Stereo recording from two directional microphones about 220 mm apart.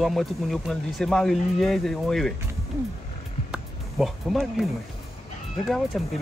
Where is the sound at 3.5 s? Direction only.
Centre (ahead or behind).